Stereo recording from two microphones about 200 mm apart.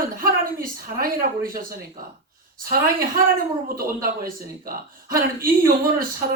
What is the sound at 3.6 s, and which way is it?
Speech, 45° right (ahead or behind).